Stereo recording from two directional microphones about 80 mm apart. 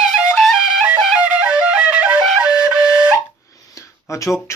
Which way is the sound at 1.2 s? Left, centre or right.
Centre.